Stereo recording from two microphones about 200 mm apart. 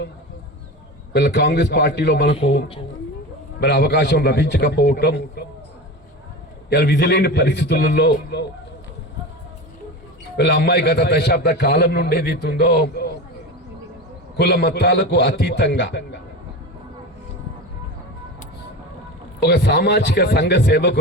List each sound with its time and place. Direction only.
1.1 s a man's voice: 55° left (ahead or behind)
3.6 s a man's voice: 55° left (ahead or behind)
6.7 s a man's voice: 55° left (ahead or behind)
10.3 s a man's voice: 55° left (ahead or behind)
14.3 s a man's voice: 55° left (ahead or behind)
19.4 s a man's voice: 55° left (ahead or behind)